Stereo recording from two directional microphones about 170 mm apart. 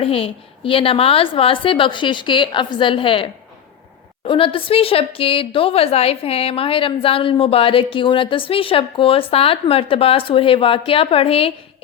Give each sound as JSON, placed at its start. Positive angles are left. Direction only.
{"t": 0.0, "sound": "a woman's voice", "side_deg": 35}